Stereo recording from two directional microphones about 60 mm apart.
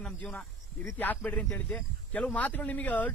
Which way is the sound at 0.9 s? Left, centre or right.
Left.